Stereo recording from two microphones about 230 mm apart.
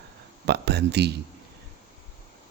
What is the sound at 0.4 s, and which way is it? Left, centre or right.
Speech, right.